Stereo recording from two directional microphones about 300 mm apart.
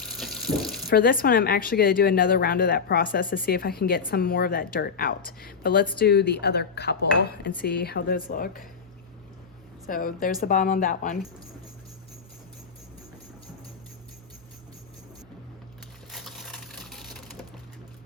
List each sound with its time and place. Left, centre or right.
0.0 s water: centre
0.9 s a woman's voice: left
9.8 s speech: left
16.1 s a sound: centre